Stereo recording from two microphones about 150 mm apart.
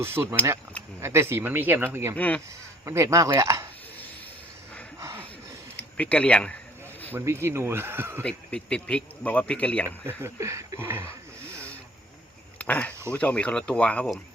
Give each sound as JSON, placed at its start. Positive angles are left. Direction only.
{"t": 0.0, "sound": "speech", "side_deg": -15}
{"t": 2.1, "sound": "speech", "side_deg": 10}
{"t": 2.8, "sound": "speech", "side_deg": -20}
{"t": 4.9, "sound": "a sound", "side_deg": -20}
{"t": 5.7, "sound": "speech", "side_deg": 10}
{"t": 7.1, "sound": "speech", "side_deg": -15}
{"t": 8.2, "sound": "speech", "side_deg": 10}
{"t": 10.1, "sound": "speech", "side_deg": -15}
{"t": 12.5, "sound": "a sound", "side_deg": 10}
{"t": 13.1, "sound": "speech", "side_deg": 10}